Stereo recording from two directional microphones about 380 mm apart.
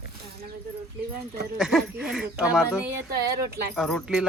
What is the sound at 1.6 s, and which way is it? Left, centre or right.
Speech, centre.